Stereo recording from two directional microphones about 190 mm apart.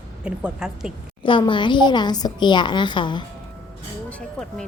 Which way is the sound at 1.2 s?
25° left (ahead or behind).